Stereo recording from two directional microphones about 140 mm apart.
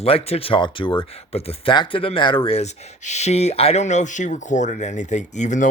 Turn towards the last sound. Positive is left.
turn(degrees=60)  # may be behind; listen again after turning